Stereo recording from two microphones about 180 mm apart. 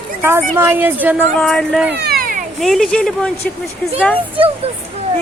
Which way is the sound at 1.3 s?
5° left (ahead or behind).